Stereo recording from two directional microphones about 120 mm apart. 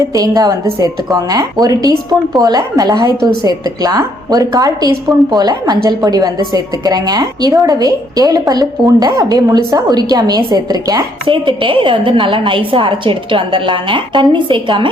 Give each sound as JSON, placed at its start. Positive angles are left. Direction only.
{"t": 0.1, "sound": "a woman's voice", "side_deg": -30}